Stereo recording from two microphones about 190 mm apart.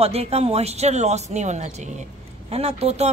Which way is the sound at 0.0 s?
30° right (ahead or behind).